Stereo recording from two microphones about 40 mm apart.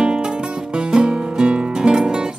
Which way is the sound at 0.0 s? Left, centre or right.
Centre.